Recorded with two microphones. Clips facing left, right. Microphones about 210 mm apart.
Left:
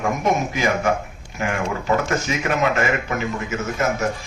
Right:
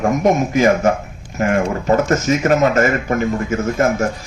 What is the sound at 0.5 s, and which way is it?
A man's voice, 40° right (ahead or behind).